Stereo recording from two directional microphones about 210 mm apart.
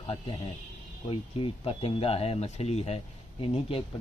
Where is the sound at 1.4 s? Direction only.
25° left (ahead or behind).